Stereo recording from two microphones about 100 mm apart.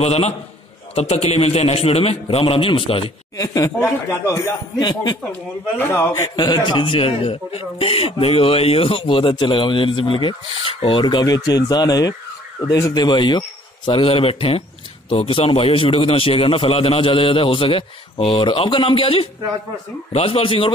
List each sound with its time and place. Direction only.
0.0 s a man's voice: 90° left
2.2 s a man's voice: 70° left (ahead or behind)
3.3 s speech: 35° left (ahead or behind)
4.7 s speech: 45° left (ahead or behind)
5.8 s a man's voice: 25° left (ahead or behind)
6.3 s a man's voice: 50° left (ahead or behind)
13.8 s a man's voice: 70° left (ahead or behind)
20.1 s speech: 85° left; by 20.7 s 65° left (ahead or behind)